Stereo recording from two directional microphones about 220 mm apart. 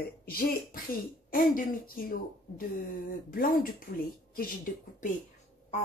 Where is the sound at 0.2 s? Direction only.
40° left (ahead or behind).